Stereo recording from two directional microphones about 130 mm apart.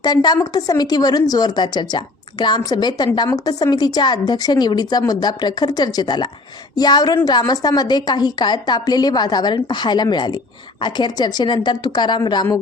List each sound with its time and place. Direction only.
0.0 s speech: 30° left (ahead or behind)